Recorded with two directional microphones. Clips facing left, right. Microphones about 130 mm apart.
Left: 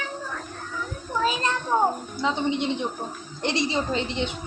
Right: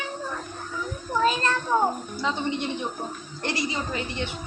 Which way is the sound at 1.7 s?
15° left (ahead or behind).